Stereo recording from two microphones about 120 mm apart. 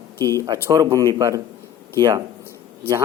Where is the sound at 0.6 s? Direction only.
30° right (ahead or behind).